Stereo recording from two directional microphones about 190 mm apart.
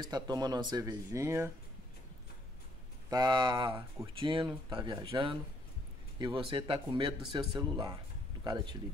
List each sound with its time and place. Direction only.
0.0 s speech: 20° right (ahead or behind)
3.1 s speech: 20° right (ahead or behind)